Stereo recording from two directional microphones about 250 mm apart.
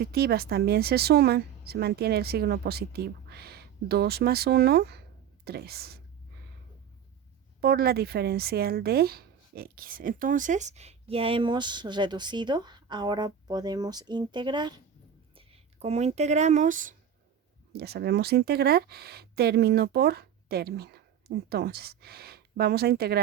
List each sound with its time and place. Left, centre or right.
0.0 s speech: right
7.6 s speech: right